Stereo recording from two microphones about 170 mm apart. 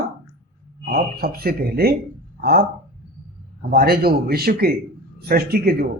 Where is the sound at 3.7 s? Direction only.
65° right (ahead or behind).